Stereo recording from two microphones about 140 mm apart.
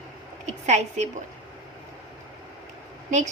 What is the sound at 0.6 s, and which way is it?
Speech, 55° right (ahead or behind).